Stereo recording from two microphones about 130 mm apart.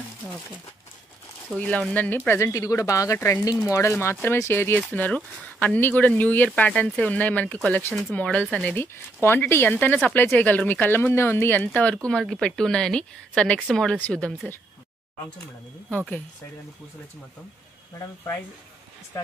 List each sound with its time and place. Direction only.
1.5 s speech: 5° left (ahead or behind)
17.9 s speech: 20° left (ahead or behind)